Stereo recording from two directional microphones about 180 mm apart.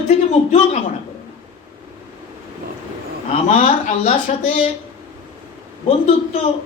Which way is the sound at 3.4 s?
45° left (ahead or behind).